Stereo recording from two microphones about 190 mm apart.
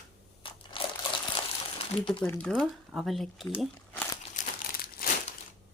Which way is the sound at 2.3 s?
5° left (ahead or behind).